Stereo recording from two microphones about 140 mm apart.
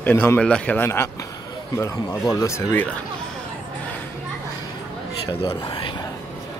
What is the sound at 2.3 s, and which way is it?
Speech, 20° left (ahead or behind).